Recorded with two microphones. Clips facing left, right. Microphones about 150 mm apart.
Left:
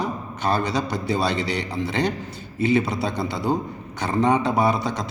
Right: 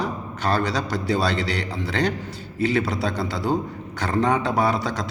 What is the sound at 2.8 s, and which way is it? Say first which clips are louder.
A man's voice: even; centre (ahead or behind).